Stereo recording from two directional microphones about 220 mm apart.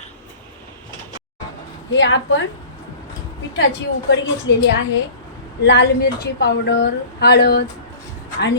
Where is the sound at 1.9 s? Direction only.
60° left (ahead or behind).